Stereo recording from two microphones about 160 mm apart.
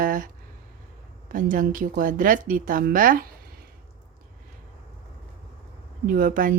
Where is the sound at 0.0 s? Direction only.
55° right (ahead or behind).